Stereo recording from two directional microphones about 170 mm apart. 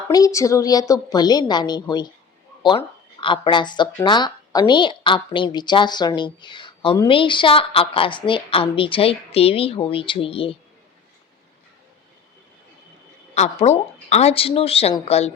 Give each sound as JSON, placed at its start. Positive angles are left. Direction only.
{"t": 0.1, "sound": "a woman's voice", "side_deg": 20}
{"t": 13.3, "sound": "a woman's voice", "side_deg": 40}